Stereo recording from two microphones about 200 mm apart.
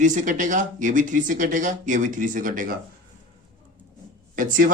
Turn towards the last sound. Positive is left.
turn(degrees=-40)  # may be behind; listen again after turning